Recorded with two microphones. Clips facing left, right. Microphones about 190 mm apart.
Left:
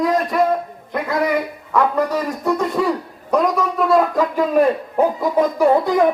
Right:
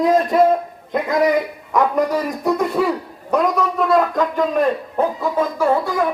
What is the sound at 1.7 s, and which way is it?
Hoot, 15° right (ahead or behind).